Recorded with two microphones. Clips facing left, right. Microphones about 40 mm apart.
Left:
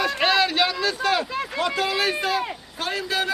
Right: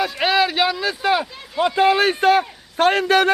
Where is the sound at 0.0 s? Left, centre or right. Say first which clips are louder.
Right 2 dB; centre.